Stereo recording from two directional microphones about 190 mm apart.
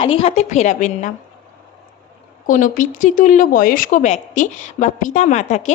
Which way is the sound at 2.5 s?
45° left (ahead or behind).